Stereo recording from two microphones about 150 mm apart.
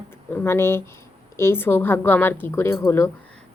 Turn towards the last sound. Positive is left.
turn(degrees=20)  # may be behind; listen again after turning